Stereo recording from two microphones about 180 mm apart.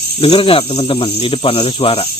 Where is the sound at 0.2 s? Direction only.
30° left (ahead or behind).